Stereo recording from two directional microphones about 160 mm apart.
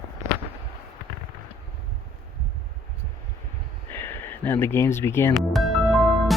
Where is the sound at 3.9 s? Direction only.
15° left (ahead or behind).